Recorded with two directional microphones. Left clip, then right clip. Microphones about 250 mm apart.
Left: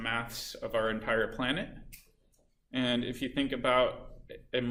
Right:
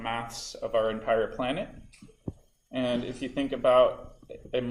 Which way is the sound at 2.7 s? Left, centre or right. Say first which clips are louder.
Right 2 dB; centre.